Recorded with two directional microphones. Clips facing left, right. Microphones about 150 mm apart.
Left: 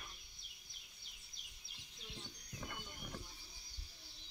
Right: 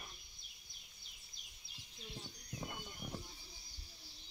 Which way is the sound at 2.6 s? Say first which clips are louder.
Right 2 dB; 20° right (ahead or behind).